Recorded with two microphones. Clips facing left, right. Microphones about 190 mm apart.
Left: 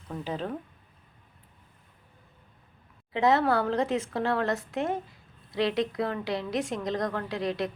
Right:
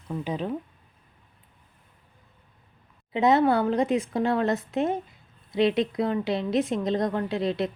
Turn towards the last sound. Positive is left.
turn(degrees=-25)  # may be behind; listen again after turning